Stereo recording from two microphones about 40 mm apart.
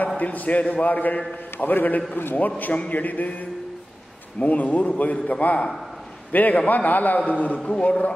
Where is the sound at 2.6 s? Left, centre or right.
Left.